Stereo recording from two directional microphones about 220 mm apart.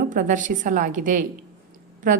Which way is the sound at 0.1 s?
35° right (ahead or behind).